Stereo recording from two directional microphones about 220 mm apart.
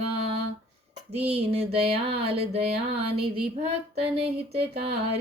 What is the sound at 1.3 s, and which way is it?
Speech, 25° right (ahead or behind).